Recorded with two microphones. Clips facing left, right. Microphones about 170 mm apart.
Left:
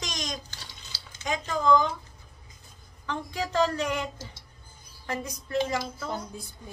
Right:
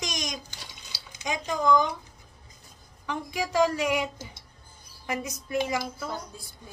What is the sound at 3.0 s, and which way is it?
Speech, 15° right (ahead or behind).